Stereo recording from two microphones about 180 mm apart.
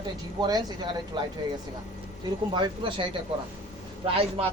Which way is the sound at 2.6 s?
25° right (ahead or behind).